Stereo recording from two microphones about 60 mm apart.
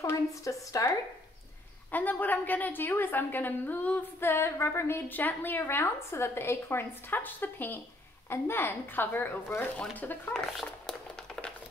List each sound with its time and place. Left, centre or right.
0.3 s a woman's voice: left
1.9 s a woman's voice: left
4.2 s a woman's voice: left
10.3 s speech: centre